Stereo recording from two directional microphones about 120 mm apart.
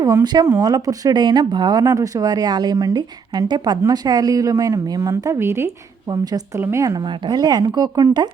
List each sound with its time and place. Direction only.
0.0 s speech: 30° right (ahead or behind)